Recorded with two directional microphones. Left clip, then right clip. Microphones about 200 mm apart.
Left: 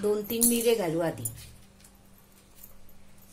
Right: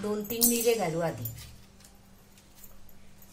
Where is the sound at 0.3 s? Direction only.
45° left (ahead or behind).